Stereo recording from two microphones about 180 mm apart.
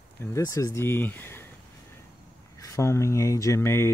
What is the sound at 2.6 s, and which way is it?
Speech, 15° left (ahead or behind).